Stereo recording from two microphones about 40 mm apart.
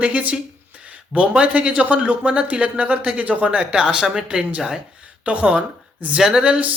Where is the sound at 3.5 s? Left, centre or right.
Right.